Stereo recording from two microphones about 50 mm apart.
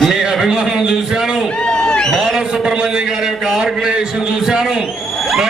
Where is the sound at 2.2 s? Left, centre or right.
Centre.